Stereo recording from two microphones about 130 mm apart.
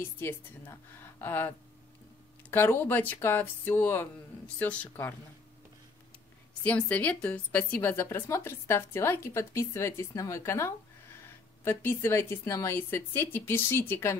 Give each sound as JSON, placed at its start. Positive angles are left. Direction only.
{"t": 0.2, "sound": "a woman's voice", "side_deg": 15}
{"t": 2.5, "sound": "a woman's voice", "side_deg": 15}
{"t": 6.6, "sound": "a woman's voice", "side_deg": 10}